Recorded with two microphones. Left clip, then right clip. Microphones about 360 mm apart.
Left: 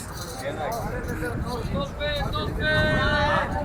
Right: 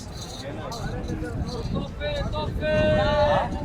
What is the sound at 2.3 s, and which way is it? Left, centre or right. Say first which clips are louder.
Vehicle: right 1 dB; right.